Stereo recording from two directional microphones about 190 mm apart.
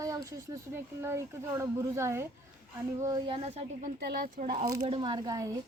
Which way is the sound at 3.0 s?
20° right (ahead or behind).